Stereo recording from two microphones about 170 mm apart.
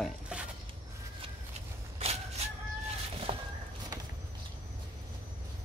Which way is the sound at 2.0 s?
35° right (ahead or behind).